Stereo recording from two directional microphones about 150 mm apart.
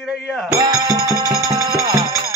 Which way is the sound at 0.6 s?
25° right (ahead or behind).